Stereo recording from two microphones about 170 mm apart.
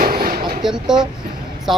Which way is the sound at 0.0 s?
55° right (ahead or behind).